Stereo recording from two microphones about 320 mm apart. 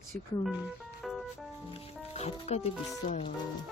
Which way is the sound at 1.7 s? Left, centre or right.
Centre.